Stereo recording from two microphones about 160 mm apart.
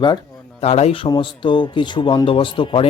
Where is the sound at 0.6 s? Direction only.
40° left (ahead or behind).